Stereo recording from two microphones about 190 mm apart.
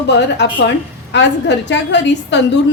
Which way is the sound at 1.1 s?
65° left (ahead or behind).